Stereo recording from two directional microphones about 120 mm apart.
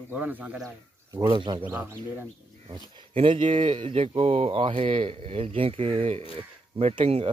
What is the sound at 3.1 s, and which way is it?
Speech, 45° right (ahead or behind).